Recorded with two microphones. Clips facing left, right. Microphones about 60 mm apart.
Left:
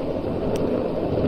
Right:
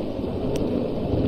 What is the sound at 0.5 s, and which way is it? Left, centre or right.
Thunder, left.